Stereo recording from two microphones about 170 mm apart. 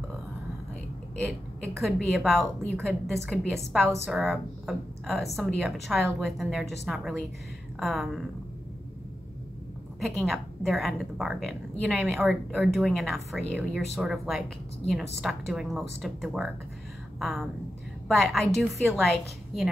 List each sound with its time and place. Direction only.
1.8 s speech: centre (ahead or behind)
9.9 s a woman's voice: centre (ahead or behind)